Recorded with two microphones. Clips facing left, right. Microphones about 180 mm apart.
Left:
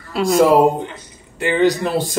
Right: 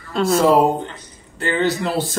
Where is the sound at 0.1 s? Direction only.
15° left (ahead or behind).